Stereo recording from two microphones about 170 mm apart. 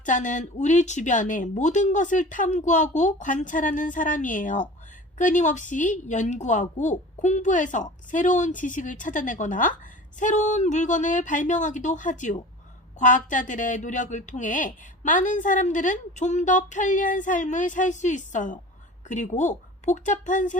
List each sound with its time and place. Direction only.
0.0 s speech: 45° left (ahead or behind)